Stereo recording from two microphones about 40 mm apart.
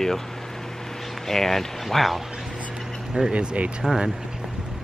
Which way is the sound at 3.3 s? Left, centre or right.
Right.